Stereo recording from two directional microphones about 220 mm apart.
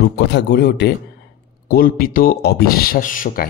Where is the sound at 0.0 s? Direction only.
50° left (ahead or behind).